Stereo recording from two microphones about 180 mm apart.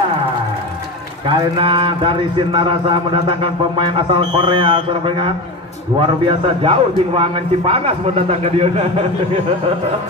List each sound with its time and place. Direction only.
1.2 s a man's voice: 30° right (ahead or behind)